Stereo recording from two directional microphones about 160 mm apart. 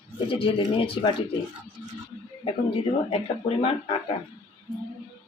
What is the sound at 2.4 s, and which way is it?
Speech, 35° left (ahead or behind).